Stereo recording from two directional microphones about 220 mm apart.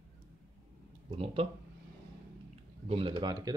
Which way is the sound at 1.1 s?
25° right (ahead or behind).